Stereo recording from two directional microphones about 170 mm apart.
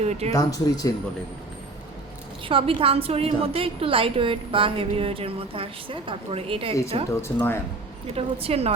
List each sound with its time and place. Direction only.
0.0 s a woman's voice: 40° right (ahead or behind)
0.3 s speech: 20° left (ahead or behind)
2.5 s a woman's voice: 35° right (ahead or behind)
7.1 s speech: 15° left (ahead or behind)
8.0 s a woman's voice: 35° right (ahead or behind)